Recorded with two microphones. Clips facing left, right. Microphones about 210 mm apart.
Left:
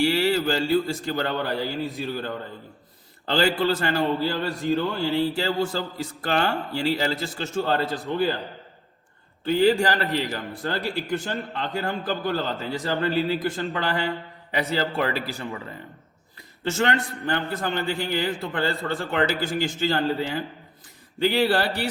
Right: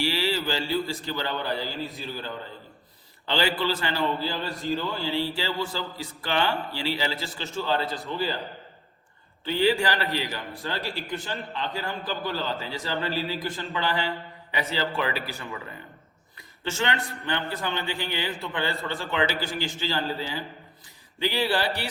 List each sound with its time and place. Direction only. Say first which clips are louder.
0.0 s a man's voice: left 6 dB; 55° left (ahead or behind)
3.2 s a man's voice: left 4 dB; 45° left (ahead or behind)
9.5 s a man's voice: left 4 dB; 45° left (ahead or behind)
16.7 s a man's voice: left 4 dB; 45° left (ahead or behind)